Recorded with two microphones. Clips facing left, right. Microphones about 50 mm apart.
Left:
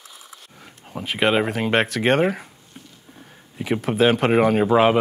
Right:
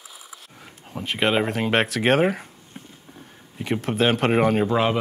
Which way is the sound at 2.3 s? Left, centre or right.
Centre.